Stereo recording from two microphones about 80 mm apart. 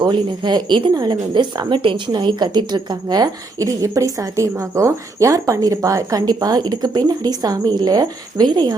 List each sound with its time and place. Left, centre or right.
0.0 s speech: right
1.3 s a woman's voice: right